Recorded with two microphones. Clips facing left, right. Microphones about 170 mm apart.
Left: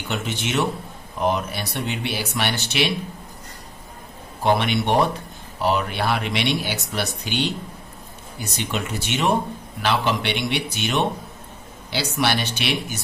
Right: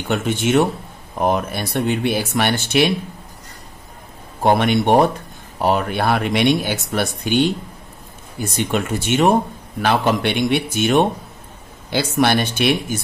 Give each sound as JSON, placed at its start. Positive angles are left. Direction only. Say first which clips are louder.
{"t": 0.1, "sound": "speech", "louder": "right 8 dB", "side_deg": -50}
{"t": 4.4, "sound": "speech", "louder": "right 5 dB", "side_deg": -50}